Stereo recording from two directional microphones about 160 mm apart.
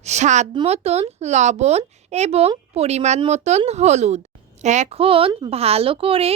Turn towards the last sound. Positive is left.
turn(degrees=-35)  # may be behind; listen again after turning